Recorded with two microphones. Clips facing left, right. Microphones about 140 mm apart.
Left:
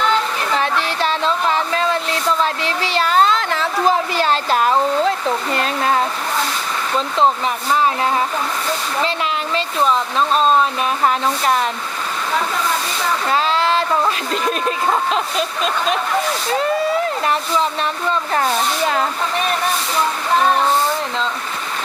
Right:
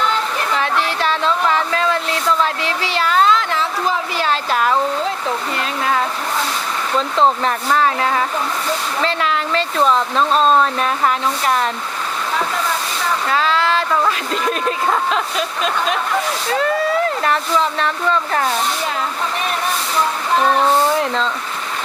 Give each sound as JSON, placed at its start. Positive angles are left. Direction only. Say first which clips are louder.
{"t": 0.6, "sound": "a sound", "louder": "even", "side_deg": 25}
{"t": 7.2, "sound": "speech", "louder": "right 1 dB", "side_deg": 10}
{"t": 9.0, "sound": "speech", "louder": "right 2 dB", "side_deg": 15}
{"t": 9.8, "sound": "speech", "louder": "right 1 dB", "side_deg": 5}
{"t": 11.0, "sound": "speech", "louder": "left 3 dB", "side_deg": 25}
{"t": 13.3, "sound": "speech", "louder": "even", "side_deg": 20}
{"t": 17.2, "sound": "speech", "louder": "right 1 dB", "side_deg": 15}